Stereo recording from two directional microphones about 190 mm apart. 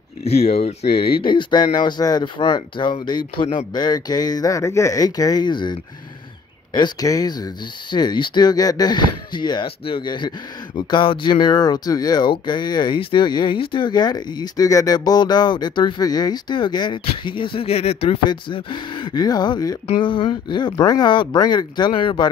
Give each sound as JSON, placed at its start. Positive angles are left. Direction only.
{"t": 0.2, "sound": "speech", "side_deg": 35}